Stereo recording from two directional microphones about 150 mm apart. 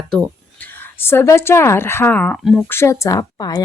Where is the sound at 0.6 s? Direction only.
15° left (ahead or behind).